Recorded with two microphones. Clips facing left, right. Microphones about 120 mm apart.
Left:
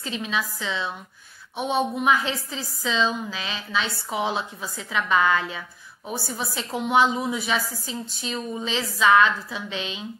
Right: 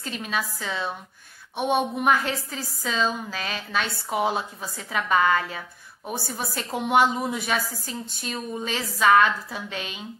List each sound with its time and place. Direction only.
0.0 s a woman's voice: 45° right (ahead or behind)